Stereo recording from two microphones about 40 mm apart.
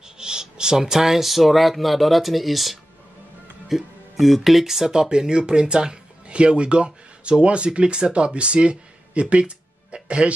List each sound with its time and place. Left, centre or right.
0.2 s speech: centre